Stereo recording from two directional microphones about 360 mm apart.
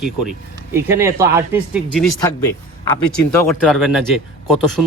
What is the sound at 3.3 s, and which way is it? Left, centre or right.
Speech, centre.